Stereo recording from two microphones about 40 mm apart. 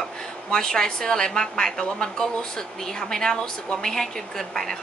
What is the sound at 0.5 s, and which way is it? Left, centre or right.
A woman's voice, centre.